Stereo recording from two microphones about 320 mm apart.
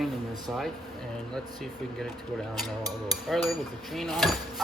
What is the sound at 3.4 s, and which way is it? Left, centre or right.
Speech, centre.